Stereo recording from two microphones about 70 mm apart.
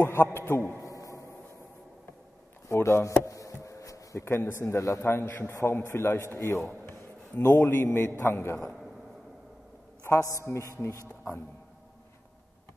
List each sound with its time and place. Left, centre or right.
0.0 s a man's voice: left
0.8 s a sound: left
2.7 s speech: left
3.3 s a sound: left
4.2 s a man's voice: left
6.7 s a man's voice: left
10.4 s a man's voice: left